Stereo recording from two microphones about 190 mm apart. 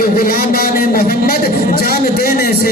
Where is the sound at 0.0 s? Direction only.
50° left (ahead or behind).